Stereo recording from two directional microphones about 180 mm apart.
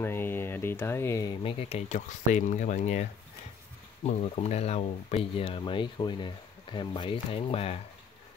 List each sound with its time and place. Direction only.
0.0 s speech: 10° left (ahead or behind)
1.4 s speech: 35° left (ahead or behind)